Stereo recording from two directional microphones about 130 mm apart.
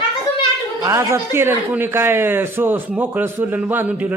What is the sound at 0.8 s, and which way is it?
A child's voice, 25° right (ahead or behind).